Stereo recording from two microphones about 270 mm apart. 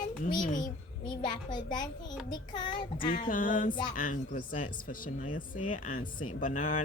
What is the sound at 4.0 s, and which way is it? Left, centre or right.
Speech, left.